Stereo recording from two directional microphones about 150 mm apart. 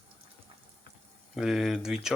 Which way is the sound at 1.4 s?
Centre (ahead or behind).